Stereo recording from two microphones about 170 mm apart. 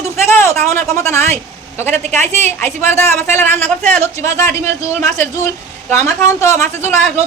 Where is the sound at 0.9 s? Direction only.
15° left (ahead or behind).